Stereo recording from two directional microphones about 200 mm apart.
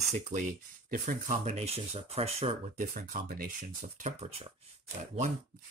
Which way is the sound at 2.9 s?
45° right (ahead or behind).